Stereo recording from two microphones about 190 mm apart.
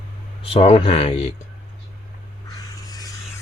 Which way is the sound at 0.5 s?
30° left (ahead or behind).